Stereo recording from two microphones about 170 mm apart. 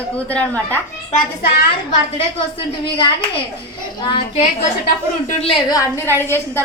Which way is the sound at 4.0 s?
25° left (ahead or behind).